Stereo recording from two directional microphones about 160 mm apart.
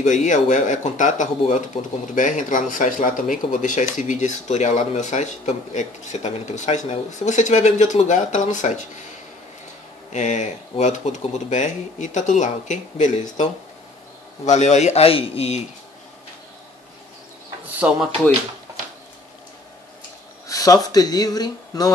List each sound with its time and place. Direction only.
0.0 s speech: 50° left (ahead or behind)
10.1 s speech: 50° left (ahead or behind)
17.8 s speech: 10° right (ahead or behind)
20.4 s speech: 20° left (ahead or behind)